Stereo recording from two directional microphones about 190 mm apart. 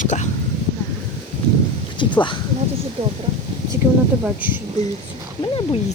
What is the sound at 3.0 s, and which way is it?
Speech, 30° right (ahead or behind).